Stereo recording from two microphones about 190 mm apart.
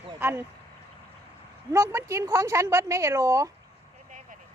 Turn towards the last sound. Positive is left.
turn(degrees=-15)  # may be behind; listen again after turning